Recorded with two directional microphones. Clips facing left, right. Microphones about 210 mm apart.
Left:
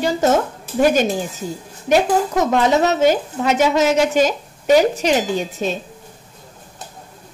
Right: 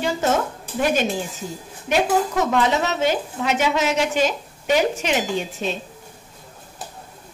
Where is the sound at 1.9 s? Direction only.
40° left (ahead or behind).